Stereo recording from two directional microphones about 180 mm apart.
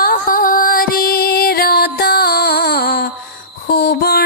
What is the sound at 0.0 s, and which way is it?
Music, 50° left (ahead or behind).